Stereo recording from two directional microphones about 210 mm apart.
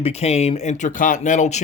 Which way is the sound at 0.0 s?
30° left (ahead or behind).